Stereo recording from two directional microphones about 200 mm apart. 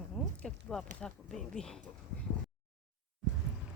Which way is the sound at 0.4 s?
Centre (ahead or behind).